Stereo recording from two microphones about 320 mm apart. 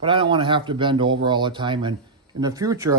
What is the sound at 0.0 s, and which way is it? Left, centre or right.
Speech, centre.